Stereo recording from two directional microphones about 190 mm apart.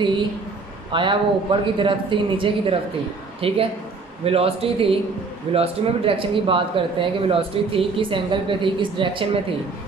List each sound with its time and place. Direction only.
0.9 s a man's voice: 25° right (ahead or behind)